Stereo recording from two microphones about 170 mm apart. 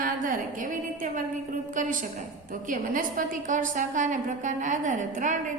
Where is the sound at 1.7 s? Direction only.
50° right (ahead or behind).